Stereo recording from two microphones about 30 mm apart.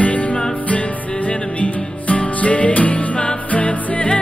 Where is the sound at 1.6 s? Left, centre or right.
Left.